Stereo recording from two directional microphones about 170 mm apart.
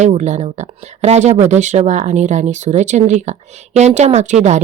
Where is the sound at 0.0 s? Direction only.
45° right (ahead or behind).